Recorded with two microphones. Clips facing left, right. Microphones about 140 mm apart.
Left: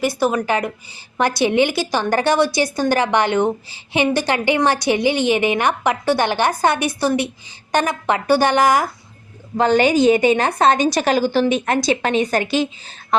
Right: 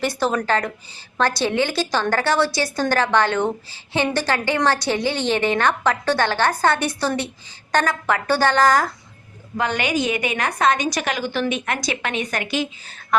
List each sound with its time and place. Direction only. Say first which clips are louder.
0.0 s a woman's voice: left 3 dB; 10° left (ahead or behind)
9.6 s a woman's voice: left 8 dB; 30° left (ahead or behind)